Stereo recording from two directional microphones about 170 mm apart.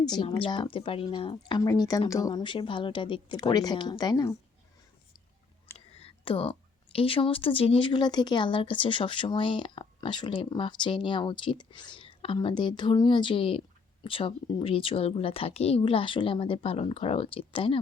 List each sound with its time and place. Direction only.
0.1 s speech: 30° left (ahead or behind)
5.7 s a woman's voice: 35° left (ahead or behind)